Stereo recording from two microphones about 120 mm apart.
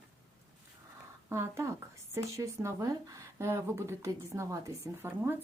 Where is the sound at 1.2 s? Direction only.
25° right (ahead or behind).